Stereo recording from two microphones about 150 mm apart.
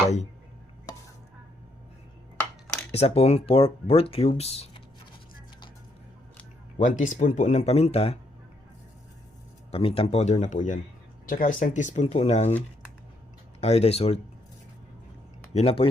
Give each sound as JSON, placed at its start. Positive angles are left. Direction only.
{"t": 2.9, "sound": "speech", "side_deg": 45}
{"t": 6.7, "sound": "speech", "side_deg": 60}
{"t": 9.7, "sound": "speech", "side_deg": 40}
{"t": 13.6, "sound": "speech", "side_deg": 45}
{"t": 15.5, "sound": "speech", "side_deg": 40}